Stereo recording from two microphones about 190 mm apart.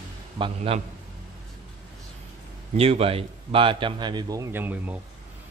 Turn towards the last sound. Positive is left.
turn(degrees=-10)  # may be behind; listen again after turning